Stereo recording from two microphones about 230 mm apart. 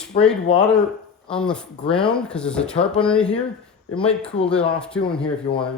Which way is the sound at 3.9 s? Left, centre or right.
Left.